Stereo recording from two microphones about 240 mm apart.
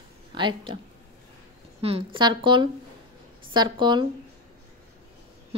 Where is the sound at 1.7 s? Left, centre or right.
Right.